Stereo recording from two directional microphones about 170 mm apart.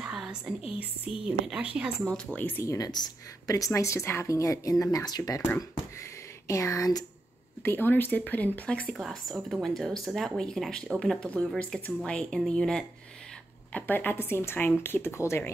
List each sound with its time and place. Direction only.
0.0 s whispering: 5° right (ahead or behind)
0.7 s a woman's voice: 10° right (ahead or behind)
2.3 s a woman's voice: 10° left (ahead or behind)
6.4 s a woman's voice: 20° left (ahead or behind)